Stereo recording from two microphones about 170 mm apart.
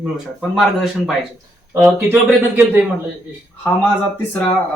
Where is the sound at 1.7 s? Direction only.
10° right (ahead or behind).